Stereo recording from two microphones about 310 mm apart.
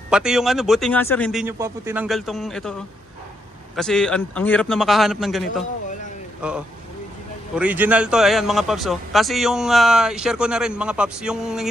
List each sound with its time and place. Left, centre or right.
0.1 s a man's voice: centre
3.7 s a man's voice: centre
6.4 s a man's voice: centre